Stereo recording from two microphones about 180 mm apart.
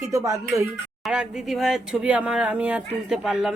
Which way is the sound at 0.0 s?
15° right (ahead or behind).